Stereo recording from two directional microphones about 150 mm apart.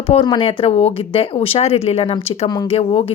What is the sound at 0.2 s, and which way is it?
Speech, 35° left (ahead or behind).